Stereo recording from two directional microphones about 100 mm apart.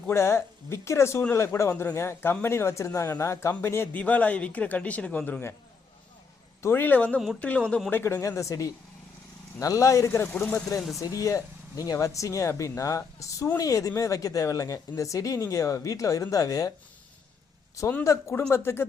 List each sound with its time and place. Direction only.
0.1 s speech: 25° left (ahead or behind)
4.0 s a man's voice: 15° left (ahead or behind)
6.6 s a man's voice: 25° left (ahead or behind)
7.9 s speech: 25° left (ahead or behind)
11.1 s speech: 35° left (ahead or behind)
18.0 s speech: 30° left (ahead or behind)